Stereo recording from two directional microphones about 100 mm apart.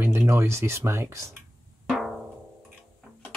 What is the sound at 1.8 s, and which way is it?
Drum, centre (ahead or behind).